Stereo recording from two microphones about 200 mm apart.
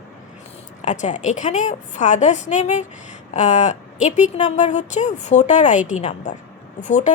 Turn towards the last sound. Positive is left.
turn(degrees=40)  # may be behind; listen again after turning